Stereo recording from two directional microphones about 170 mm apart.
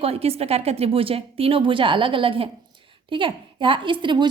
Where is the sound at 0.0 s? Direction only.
35° right (ahead or behind).